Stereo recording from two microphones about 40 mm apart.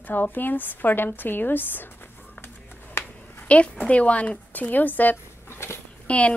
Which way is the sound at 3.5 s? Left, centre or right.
Left.